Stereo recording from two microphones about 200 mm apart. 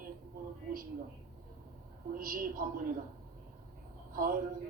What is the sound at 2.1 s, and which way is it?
Speech, 45° right (ahead or behind).